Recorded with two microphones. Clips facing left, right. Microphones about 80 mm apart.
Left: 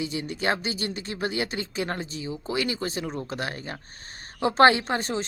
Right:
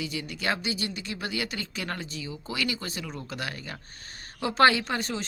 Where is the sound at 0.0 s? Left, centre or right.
Left.